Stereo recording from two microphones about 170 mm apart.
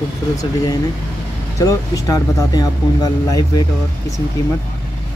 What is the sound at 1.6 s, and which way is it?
Speech, 20° left (ahead or behind).